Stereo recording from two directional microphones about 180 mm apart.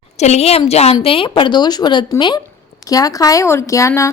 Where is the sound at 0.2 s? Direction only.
35° left (ahead or behind).